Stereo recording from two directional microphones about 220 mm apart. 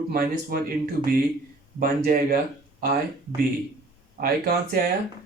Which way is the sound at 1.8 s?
40° right (ahead or behind).